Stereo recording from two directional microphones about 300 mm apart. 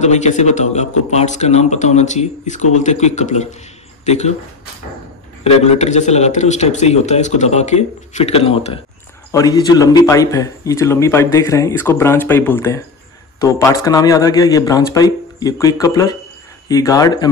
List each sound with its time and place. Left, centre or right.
0.0 s a man's voice: left
5.4 s a man's voice: left